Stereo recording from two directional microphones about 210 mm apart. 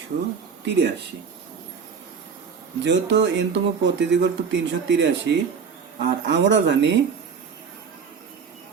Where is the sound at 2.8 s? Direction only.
55° right (ahead or behind).